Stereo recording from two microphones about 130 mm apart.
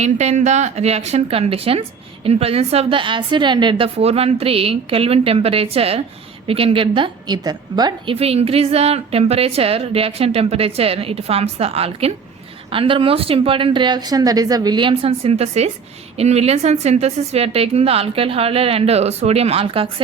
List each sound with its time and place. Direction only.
0.0 s a woman's voice: 60° right (ahead or behind); by 8.1 s 30° right (ahead or behind)
8.1 s a woman's voice: 50° right (ahead or behind)